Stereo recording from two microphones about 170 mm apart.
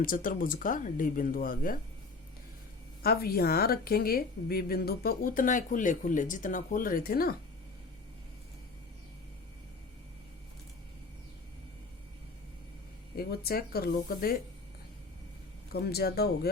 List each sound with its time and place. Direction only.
0.0 s speech: 55° left (ahead or behind)
3.0 s a woman's voice: 65° left (ahead or behind)
13.1 s a woman's voice: 65° left (ahead or behind)
15.7 s speech: 65° left (ahead or behind)